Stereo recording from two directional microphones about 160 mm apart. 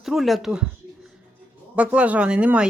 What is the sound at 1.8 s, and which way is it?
Speech, 10° right (ahead or behind).